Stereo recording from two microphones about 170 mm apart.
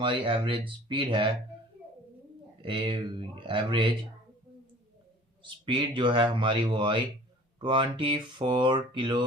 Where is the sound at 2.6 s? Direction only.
30° right (ahead or behind).